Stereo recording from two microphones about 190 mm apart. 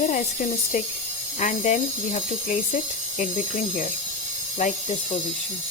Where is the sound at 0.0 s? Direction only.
40° left (ahead or behind).